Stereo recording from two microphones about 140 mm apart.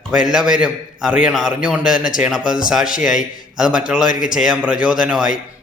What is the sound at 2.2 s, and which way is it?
A man's voice, 5° right (ahead or behind).